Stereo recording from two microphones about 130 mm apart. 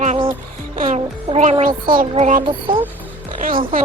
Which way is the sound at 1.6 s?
90° right.